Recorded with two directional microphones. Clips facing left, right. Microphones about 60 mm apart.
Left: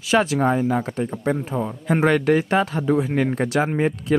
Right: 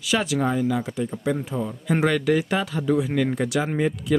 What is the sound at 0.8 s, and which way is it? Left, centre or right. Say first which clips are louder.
Speech: left 2 dB; left.